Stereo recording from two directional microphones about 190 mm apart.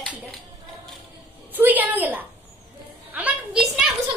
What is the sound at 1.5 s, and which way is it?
Speech, 10° right (ahead or behind).